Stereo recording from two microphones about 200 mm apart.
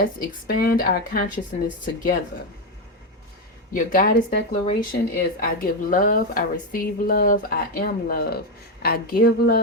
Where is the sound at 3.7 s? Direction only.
45° left (ahead or behind).